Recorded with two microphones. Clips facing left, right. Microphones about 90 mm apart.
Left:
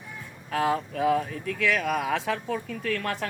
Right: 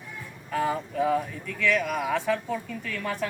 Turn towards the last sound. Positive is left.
turn(degrees=70)  # may be behind; listen again after turning